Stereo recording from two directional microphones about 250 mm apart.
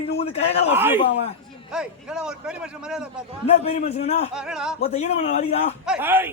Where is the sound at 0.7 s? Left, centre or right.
Centre.